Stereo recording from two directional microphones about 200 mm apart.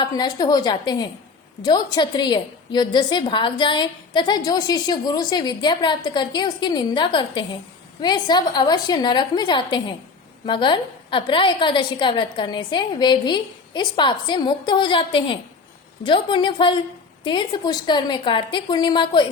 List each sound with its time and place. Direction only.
0.0 s a woman's voice: 20° left (ahead or behind)